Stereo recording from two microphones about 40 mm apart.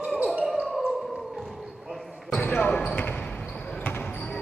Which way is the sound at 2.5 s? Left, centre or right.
Left.